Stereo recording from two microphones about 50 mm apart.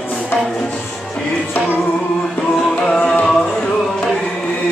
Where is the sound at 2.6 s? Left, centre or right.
Centre.